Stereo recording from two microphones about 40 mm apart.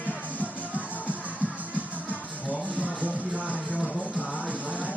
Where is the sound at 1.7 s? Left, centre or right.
Right.